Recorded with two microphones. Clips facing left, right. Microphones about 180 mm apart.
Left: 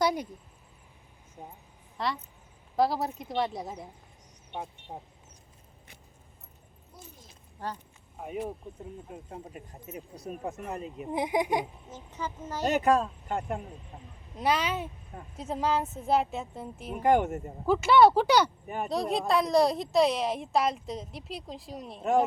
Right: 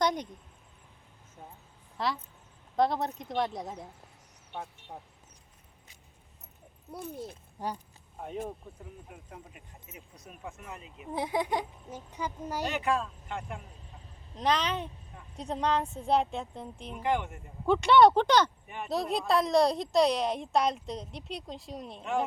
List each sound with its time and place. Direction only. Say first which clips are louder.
0.0 s speech: left 2 dB; 5° left (ahead or behind)
1.4 s speech: left 4 dB; 15° left (ahead or behind)
2.0 s a woman's voice: even; centre (ahead or behind)
6.9 s speech: right 13 dB; 65° right (ahead or behind)
7.6 s speech: right 1 dB; 15° right (ahead or behind)
8.7 s speech: left 5 dB; 15° left (ahead or behind)
9.0 s speech: left 6 dB; 35° left (ahead or behind)
11.1 s speech: left 3 dB; 15° left (ahead or behind)
11.9 s speech: even; 10° right (ahead or behind)
12.6 s speech: left 7 dB; 40° left (ahead or behind)
14.3 s a woman's voice: left 1 dB; 10° left (ahead or behind)
16.9 s speech: left 7 dB; 45° left (ahead or behind)
17.7 s a woman's voice: even; 5° left (ahead or behind)